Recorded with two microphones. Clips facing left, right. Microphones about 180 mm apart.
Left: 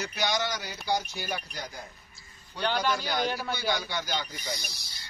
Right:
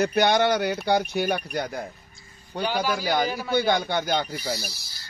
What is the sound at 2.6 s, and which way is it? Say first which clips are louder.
Speech: right 3 dB; 5° right (ahead or behind).